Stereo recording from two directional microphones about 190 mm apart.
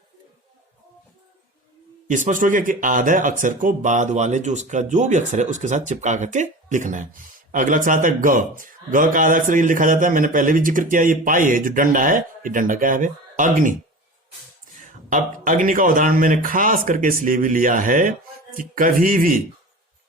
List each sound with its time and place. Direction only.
2.0 s speech: 40° right (ahead or behind)
14.8 s speech: 40° right (ahead or behind)